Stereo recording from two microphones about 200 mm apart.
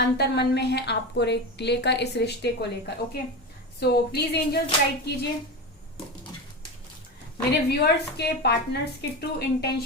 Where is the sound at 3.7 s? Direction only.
55° left (ahead or behind).